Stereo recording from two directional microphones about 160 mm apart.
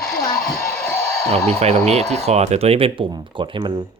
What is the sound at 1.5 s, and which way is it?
Speech, 40° right (ahead or behind).